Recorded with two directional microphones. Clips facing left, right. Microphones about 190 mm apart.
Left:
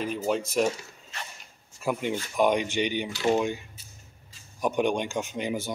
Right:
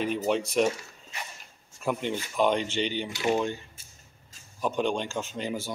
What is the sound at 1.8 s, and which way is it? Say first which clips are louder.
Speech: left 1 dB; 10° left (ahead or behind).